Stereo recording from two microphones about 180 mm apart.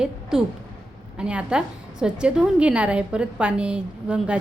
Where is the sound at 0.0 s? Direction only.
5° right (ahead or behind).